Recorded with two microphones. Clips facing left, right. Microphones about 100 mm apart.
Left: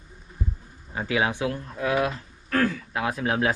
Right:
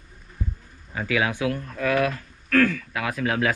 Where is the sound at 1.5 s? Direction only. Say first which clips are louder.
Right 2 dB; 15° left (ahead or behind).